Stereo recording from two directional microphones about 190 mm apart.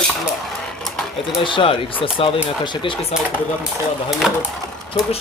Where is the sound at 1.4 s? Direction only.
25° left (ahead or behind).